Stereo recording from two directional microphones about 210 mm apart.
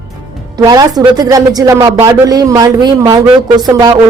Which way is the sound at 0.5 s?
20° right (ahead or behind).